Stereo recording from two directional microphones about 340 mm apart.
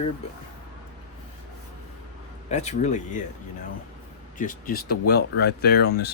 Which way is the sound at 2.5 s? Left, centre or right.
Centre.